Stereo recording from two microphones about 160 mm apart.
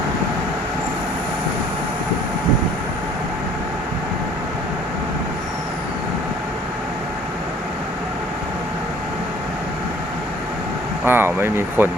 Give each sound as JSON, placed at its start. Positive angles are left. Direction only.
{"t": 11.0, "sound": "speech", "side_deg": -15}